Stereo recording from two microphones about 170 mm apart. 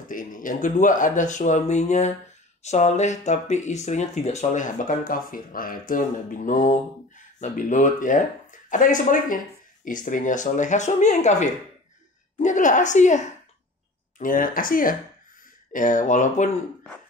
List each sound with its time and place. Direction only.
0.1 s speech: 50° left (ahead or behind)